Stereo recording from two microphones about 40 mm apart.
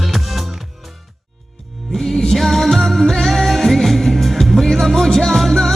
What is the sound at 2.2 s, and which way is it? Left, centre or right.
Music, centre.